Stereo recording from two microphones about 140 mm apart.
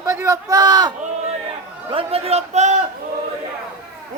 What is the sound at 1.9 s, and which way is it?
Speech, 45° right (ahead or behind).